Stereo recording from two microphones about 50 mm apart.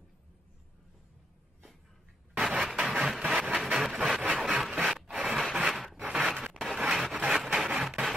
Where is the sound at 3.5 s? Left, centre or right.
Centre.